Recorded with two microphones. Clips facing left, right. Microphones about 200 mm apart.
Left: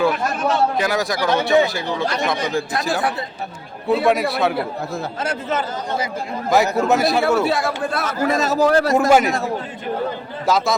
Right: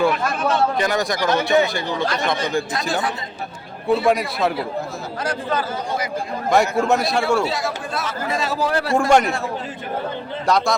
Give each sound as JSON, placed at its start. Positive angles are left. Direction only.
{"t": 0.8, "sound": "a man's voice", "side_deg": 5}
{"t": 3.8, "sound": "a man's voice", "side_deg": 0}
{"t": 5.2, "sound": "speech", "side_deg": 25}
{"t": 6.5, "sound": "a man's voice", "side_deg": 0}
{"t": 7.4, "sound": "a man's voice", "side_deg": 55}
{"t": 9.0, "sound": "a man's voice", "side_deg": 5}
{"t": 10.4, "sound": "a man's voice", "side_deg": 0}